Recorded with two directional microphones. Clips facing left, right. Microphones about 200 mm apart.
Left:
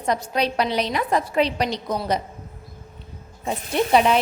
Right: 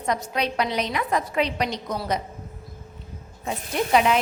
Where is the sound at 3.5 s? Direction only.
30° left (ahead or behind).